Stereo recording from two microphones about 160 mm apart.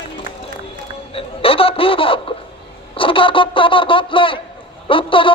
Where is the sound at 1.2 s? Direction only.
35° left (ahead or behind).